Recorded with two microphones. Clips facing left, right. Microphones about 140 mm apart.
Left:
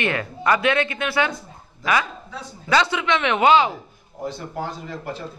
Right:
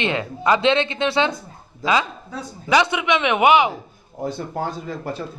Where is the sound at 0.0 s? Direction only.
20° right (ahead or behind).